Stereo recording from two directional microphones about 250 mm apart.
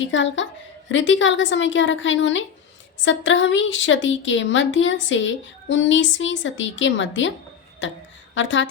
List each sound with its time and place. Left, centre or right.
0.0 s speech: left